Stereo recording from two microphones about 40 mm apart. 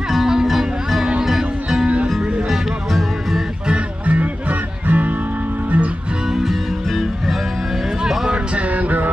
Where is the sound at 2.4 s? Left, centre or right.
Centre.